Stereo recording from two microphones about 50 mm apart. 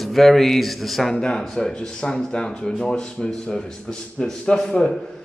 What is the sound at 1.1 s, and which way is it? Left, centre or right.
Speech, centre.